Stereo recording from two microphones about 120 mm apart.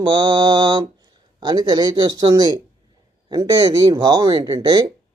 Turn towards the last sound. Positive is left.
turn(degrees=-35)  # may be behind; listen again after turning